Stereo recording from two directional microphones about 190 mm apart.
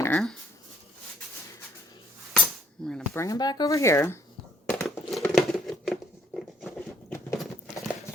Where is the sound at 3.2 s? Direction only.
20° left (ahead or behind).